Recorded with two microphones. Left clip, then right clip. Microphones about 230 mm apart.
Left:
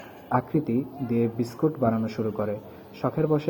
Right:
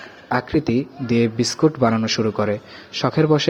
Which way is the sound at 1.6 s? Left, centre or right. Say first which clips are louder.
Right 7 dB; right.